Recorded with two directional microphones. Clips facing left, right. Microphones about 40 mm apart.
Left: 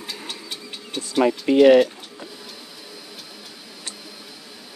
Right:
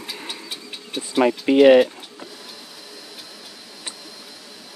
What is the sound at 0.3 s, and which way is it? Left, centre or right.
Vehicle, centre.